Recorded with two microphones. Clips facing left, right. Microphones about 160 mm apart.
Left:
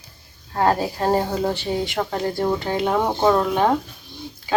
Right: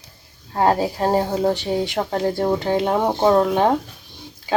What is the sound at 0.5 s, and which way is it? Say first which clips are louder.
Speech: right 2 dB; 20° right (ahead or behind).